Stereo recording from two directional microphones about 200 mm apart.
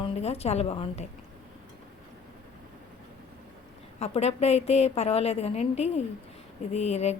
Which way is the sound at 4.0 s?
30° left (ahead or behind).